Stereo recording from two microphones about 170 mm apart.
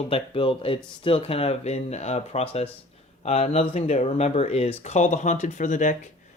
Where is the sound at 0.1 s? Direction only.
30° left (ahead or behind).